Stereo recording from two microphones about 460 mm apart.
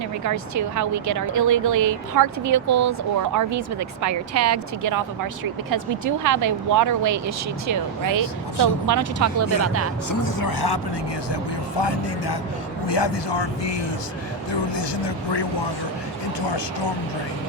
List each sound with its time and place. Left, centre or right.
0.3 s speech: right
10.1 s speech: left
11.8 s speech: left
14.8 s speech: left